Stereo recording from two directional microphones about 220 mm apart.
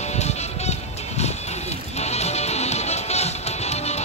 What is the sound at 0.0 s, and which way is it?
Music, 30° left (ahead or behind).